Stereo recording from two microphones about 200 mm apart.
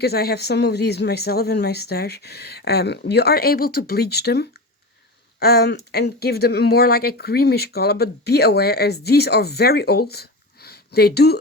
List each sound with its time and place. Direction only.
0.0 s speech: 50° left (ahead or behind)